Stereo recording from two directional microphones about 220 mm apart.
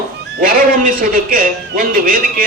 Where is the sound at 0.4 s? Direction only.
40° right (ahead or behind).